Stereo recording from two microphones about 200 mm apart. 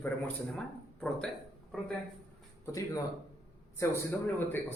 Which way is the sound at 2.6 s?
15° left (ahead or behind).